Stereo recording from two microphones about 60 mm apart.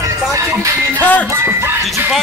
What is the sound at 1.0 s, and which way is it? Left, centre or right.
Music, left.